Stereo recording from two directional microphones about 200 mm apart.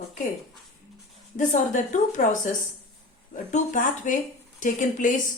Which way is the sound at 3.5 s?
40° left (ahead or behind).